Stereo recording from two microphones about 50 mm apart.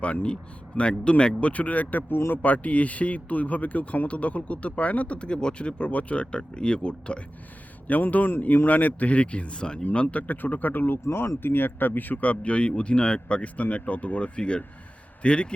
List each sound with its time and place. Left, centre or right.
0.0 s speech: left
2.4 s speech: left
7.9 s speech: left